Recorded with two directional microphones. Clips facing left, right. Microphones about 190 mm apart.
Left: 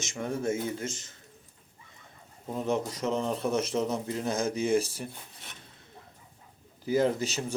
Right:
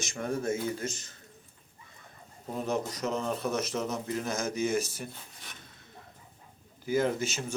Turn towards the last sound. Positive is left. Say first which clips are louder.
# left 2 dB
turn(degrees=35)  # may be behind; listen again after turning